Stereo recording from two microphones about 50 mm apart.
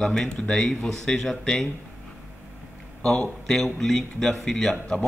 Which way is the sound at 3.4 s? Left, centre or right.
Centre.